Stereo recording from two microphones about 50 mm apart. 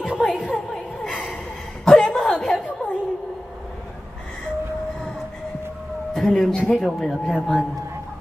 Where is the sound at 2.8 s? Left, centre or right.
Centre.